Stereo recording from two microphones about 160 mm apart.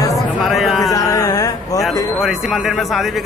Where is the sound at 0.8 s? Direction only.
20° left (ahead or behind).